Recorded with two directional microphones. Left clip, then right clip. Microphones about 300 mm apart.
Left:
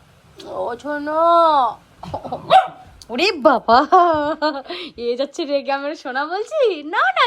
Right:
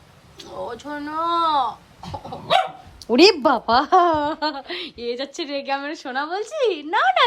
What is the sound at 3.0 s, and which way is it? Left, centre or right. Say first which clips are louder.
Speech: right 5 dB; centre.